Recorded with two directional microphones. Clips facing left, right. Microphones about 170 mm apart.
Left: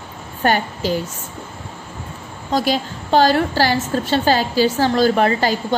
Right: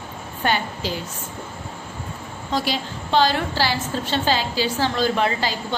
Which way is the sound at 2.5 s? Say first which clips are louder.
Left 5 dB; 45° left (ahead or behind).